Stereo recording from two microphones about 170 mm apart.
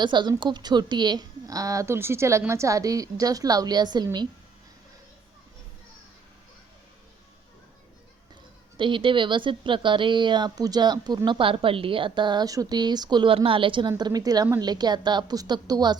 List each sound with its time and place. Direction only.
0.0 s speech: 25° right (ahead or behind)
8.8 s speech: 30° right (ahead or behind)